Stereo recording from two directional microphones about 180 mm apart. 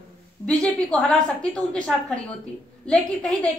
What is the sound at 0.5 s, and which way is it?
A woman's voice, 5° left (ahead or behind).